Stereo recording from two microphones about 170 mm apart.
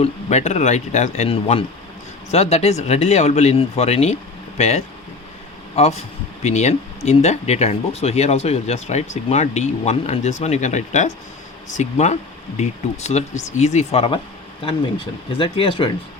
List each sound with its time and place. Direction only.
0.0 s speech: 40° left (ahead or behind)